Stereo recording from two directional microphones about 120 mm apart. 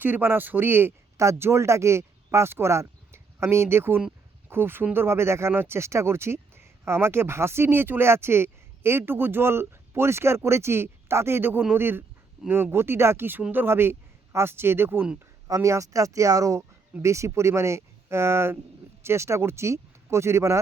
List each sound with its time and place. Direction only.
0.0 s speech: 15° right (ahead or behind)